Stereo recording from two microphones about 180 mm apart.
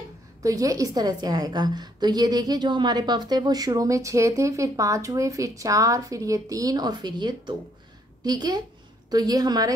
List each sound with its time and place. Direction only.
0.4 s a woman's voice: 20° right (ahead or behind)